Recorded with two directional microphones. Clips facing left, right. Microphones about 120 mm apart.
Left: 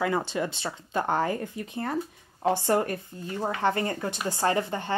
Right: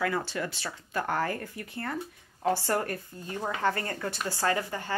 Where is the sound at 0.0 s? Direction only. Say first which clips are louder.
Left 3 dB; 20° left (ahead or behind).